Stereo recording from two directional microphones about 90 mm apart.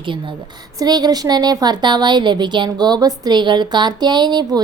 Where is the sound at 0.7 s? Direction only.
50° right (ahead or behind).